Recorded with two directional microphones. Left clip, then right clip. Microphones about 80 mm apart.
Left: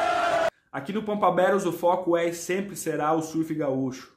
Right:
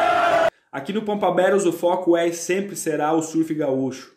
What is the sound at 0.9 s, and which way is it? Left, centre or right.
Speech, left.